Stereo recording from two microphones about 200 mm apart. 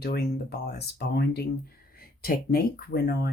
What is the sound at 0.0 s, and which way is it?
Speech, 50° left (ahead or behind).